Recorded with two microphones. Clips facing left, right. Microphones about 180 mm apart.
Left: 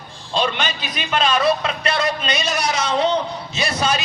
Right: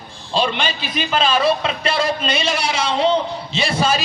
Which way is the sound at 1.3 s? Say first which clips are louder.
Left 1 dB; 30° right (ahead or behind).